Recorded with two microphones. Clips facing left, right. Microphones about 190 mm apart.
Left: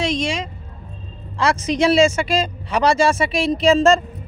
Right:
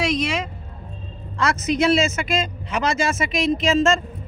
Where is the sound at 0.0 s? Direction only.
30° left (ahead or behind).